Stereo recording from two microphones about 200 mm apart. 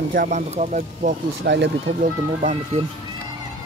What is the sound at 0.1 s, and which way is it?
Speech, 40° right (ahead or behind).